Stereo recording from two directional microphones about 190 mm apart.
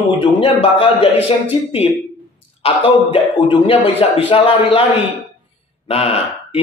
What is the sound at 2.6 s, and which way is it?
A man's voice, 30° left (ahead or behind).